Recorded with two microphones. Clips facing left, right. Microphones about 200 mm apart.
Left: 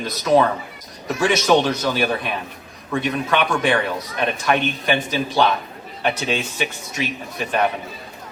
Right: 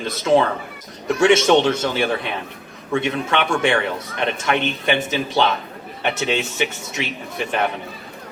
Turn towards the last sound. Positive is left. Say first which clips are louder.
# even
turn(degrees=-25)  # may be behind; listen again after turning